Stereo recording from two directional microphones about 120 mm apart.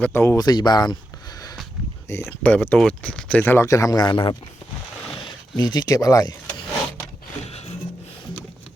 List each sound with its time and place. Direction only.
0.0 s speech: 20° left (ahead or behind)
0.3 s speech: 35° left (ahead or behind)
2.4 s speech: 10° left (ahead or behind); by 6.3 s 30° left (ahead or behind)